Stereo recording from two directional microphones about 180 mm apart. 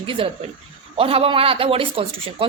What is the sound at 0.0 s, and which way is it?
A woman's voice, 30° right (ahead or behind).